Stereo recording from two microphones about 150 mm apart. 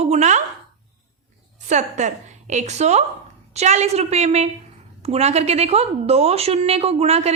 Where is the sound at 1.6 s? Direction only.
50° right (ahead or behind).